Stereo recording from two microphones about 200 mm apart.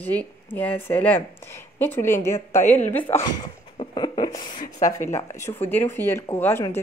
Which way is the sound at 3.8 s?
20° left (ahead or behind).